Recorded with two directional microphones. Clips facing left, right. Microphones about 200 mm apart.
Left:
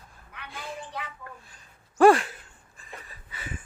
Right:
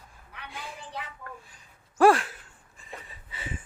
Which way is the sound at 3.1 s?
25° right (ahead or behind).